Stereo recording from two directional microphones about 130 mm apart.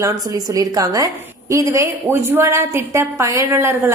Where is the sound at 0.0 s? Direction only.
25° right (ahead or behind).